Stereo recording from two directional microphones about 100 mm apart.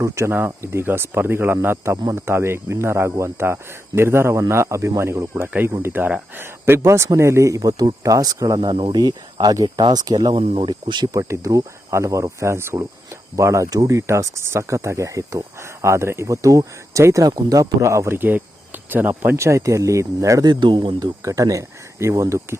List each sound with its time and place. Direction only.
0.0 s speech: 25° right (ahead or behind); by 10.3 s 40° right (ahead or behind)
10.3 s speech: 65° right (ahead or behind)
10.7 s speech: 50° right (ahead or behind); by 20.5 s 30° right (ahead or behind)
20.5 s speech: 50° right (ahead or behind)
21.0 s speech: 35° right (ahead or behind)